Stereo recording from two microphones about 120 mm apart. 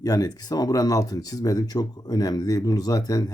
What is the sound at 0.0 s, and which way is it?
Speech, 30° left (ahead or behind).